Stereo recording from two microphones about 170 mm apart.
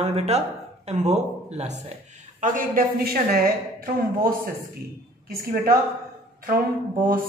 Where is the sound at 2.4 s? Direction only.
55° right (ahead or behind).